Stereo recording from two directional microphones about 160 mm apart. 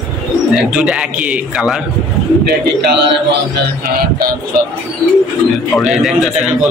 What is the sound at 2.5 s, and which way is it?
Speech, 90° right.